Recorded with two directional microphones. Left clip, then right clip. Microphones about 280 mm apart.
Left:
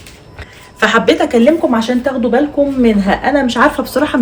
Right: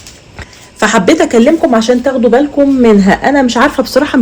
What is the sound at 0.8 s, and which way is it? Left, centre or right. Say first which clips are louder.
A man's voice: right 2 dB; right.